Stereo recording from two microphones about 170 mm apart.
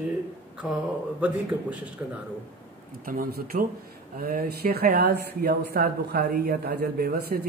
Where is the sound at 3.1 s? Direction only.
55° right (ahead or behind).